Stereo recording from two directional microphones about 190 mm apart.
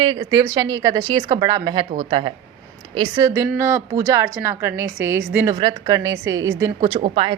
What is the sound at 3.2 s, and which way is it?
A woman's voice, 15° right (ahead or behind).